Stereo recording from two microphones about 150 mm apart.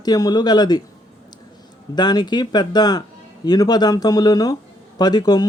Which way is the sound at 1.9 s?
30° left (ahead or behind).